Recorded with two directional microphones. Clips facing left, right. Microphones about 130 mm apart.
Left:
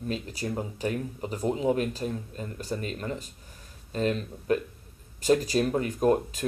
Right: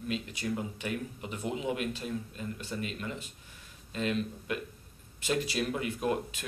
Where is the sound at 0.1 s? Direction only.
35° left (ahead or behind).